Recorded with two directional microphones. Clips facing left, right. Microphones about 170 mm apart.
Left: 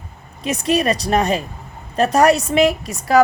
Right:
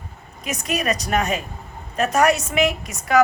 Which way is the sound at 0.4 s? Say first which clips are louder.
Left 6 dB; 30° left (ahead or behind).